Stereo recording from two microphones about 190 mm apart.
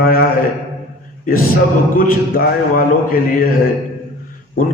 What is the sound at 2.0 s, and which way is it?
A man's voice, 50° left (ahead or behind).